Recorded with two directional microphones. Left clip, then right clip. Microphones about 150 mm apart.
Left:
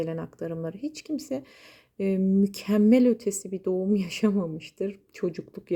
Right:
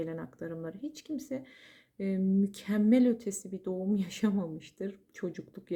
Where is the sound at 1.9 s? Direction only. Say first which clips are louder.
Left 7 dB; 50° left (ahead or behind).